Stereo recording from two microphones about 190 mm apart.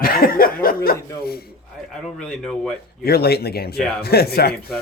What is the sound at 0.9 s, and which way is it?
Dog, 55° left (ahead or behind).